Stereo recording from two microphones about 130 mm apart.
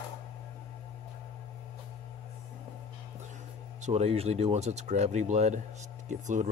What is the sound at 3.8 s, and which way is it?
Speech, 55° right (ahead or behind).